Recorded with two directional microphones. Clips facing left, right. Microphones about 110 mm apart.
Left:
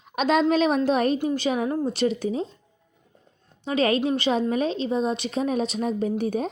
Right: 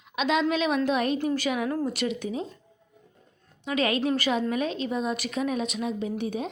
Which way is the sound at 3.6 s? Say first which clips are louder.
Left 3 dB; 35° left (ahead or behind).